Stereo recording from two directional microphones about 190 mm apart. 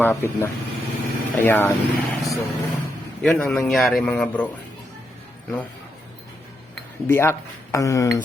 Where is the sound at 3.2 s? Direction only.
Centre (ahead or behind).